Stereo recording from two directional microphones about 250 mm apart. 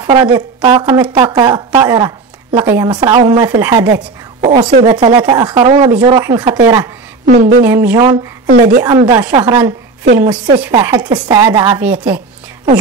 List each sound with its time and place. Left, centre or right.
0.0 s a woman's voice: centre
4.4 s a woman's voice: right
7.2 s a woman's voice: right
7.6 s a woman's voice: centre
8.5 s a woman's voice: right
8.8 s a woman's voice: centre